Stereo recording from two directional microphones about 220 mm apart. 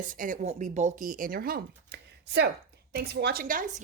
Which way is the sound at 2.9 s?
45° right (ahead or behind).